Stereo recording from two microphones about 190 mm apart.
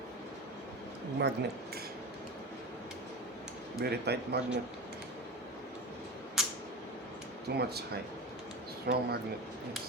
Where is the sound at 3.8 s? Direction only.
60° right (ahead or behind).